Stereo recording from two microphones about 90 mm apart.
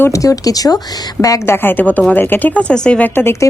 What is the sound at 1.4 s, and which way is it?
Speech, 25° left (ahead or behind).